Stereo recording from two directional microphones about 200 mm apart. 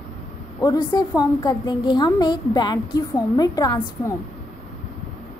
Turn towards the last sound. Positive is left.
turn(degrees=20)  # may be behind; listen again after turning